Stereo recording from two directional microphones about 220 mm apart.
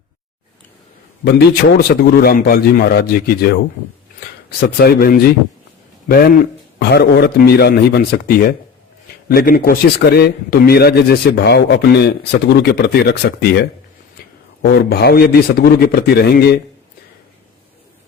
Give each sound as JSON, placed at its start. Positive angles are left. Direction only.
{"t": 1.2, "sound": "a man's voice", "side_deg": 45}
{"t": 4.8, "sound": "a man's voice", "side_deg": 45}
{"t": 14.6, "sound": "a man's voice", "side_deg": 45}